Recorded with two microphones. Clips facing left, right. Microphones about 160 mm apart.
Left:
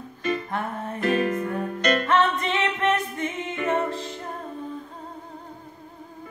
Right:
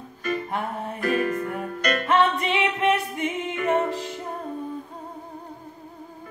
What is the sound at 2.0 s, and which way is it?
Music, 10° right (ahead or behind).